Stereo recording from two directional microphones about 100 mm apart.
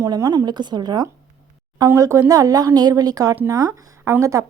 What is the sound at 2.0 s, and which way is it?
A woman's voice, 30° right (ahead or behind).